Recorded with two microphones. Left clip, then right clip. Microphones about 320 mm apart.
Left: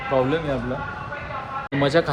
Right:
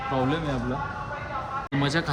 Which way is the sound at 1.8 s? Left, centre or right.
Centre.